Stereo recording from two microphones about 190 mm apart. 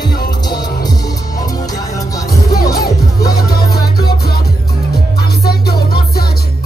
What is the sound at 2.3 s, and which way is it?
Music, 20° left (ahead or behind).